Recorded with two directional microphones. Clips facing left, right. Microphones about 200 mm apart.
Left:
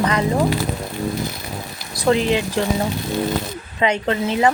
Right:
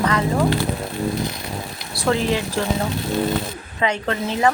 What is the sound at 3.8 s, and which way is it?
Speech, 20° left (ahead or behind).